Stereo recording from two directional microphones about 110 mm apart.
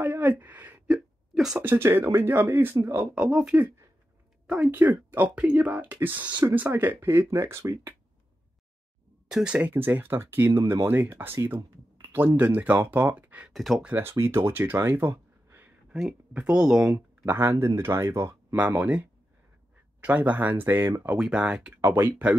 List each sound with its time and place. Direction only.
0.0 s a sound: 15° right (ahead or behind)
0.8 s hiccup: 5° right (ahead or behind)
1.6 s speech: 20° right (ahead or behind)
3.2 s speech: 10° right (ahead or behind); by 7.9 s 25° right (ahead or behind)
9.3 s speech: 10° right (ahead or behind)
13.5 s speech: centre (ahead or behind)
13.8 s speech: 20° right (ahead or behind)
15.9 s speech: 5° right (ahead or behind)
16.9 s speech: 20° right (ahead or behind)
21.8 s speech: 30° right (ahead or behind)